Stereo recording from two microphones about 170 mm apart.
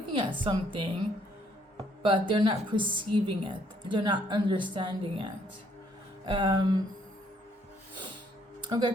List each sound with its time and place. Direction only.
0.1 s a woman's voice: 30° right (ahead or behind)
2.0 s a woman's voice: 30° right (ahead or behind)
8.6 s speech: 25° right (ahead or behind)